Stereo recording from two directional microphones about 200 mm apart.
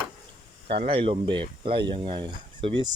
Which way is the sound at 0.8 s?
25° right (ahead or behind).